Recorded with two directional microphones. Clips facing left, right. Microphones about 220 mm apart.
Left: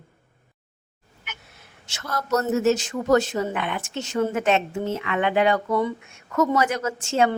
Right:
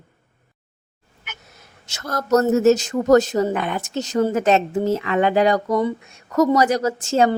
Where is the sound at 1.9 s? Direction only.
40° right (ahead or behind).